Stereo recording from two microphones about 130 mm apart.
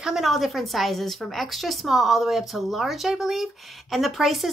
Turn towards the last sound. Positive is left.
turn(degrees=0)  # may be behind; listen again after turning